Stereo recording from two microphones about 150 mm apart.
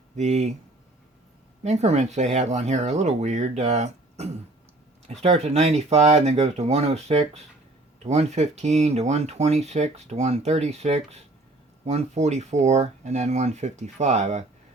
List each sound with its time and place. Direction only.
0.2 s speech: 50° right (ahead or behind)
1.6 s speech: 45° right (ahead or behind)